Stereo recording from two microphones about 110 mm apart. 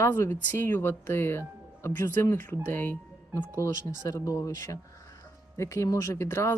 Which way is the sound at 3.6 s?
30° left (ahead or behind).